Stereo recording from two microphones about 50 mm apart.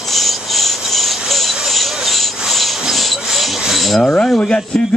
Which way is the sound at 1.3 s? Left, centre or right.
Centre.